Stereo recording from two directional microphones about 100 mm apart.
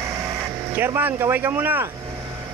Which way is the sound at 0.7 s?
20° right (ahead or behind).